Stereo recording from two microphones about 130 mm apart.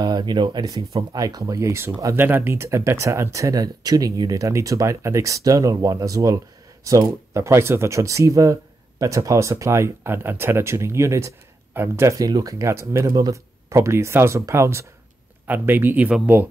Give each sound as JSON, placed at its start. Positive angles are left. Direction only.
{"t": 0.0, "sound": "speech", "side_deg": -35}